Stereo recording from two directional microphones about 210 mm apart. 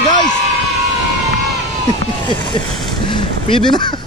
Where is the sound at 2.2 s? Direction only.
20° left (ahead or behind).